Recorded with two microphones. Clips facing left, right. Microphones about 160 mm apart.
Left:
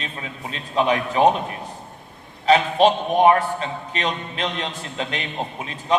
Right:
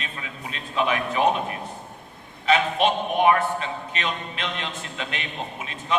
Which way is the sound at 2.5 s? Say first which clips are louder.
Left 5 dB; 35° left (ahead or behind).